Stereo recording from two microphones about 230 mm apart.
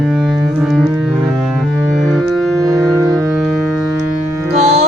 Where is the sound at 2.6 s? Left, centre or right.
Centre.